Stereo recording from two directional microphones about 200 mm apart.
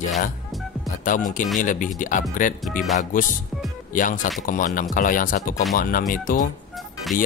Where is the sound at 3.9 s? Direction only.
40° left (ahead or behind).